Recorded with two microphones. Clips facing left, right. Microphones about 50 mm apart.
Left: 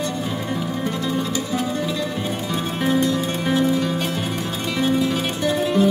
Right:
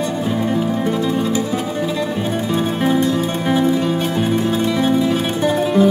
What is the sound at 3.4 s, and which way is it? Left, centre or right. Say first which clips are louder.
Music: right 3 dB; centre.